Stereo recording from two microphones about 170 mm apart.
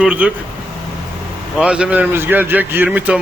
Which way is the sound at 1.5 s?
5° right (ahead or behind).